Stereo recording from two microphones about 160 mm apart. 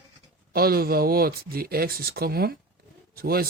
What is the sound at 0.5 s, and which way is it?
Speech, 70° right (ahead or behind).